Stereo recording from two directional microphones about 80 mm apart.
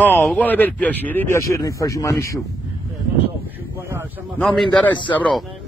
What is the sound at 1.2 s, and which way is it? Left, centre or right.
Speech, left.